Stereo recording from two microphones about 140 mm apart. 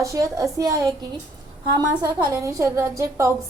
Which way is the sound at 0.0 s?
20° right (ahead or behind).